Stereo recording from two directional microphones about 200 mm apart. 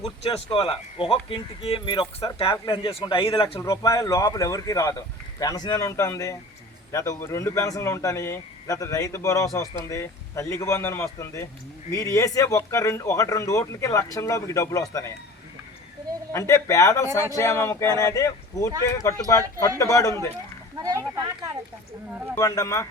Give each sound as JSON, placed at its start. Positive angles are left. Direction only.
{"t": 0.0, "sound": "speech", "side_deg": 30}
{"t": 16.3, "sound": "speech", "side_deg": 15}
{"t": 20.7, "sound": "speech", "side_deg": -20}
{"t": 22.4, "sound": "speech", "side_deg": 15}